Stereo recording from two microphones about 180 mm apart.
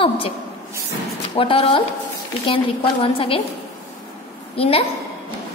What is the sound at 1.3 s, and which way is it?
A woman's voice, 30° left (ahead or behind).